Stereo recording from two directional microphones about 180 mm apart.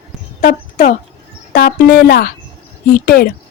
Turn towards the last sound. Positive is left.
turn(degrees=55)  # may be behind; listen again after turning